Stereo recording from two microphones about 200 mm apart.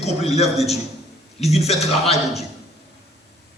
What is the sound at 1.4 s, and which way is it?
Speech, 30° left (ahead or behind).